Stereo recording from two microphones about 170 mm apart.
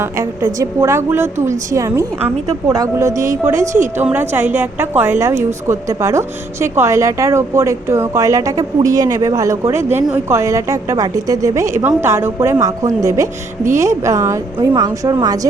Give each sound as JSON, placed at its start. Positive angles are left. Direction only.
{"t": 0.0, "sound": "a woman's voice", "side_deg": -20}